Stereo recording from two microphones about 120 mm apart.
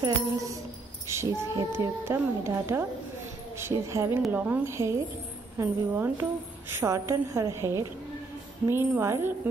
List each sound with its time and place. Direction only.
0.0 s speech: 25° right (ahead or behind)
1.0 s child singing: 25° right (ahead or behind)
1.8 s speech: 20° right (ahead or behind)
4.3 s speech: 15° right (ahead or behind)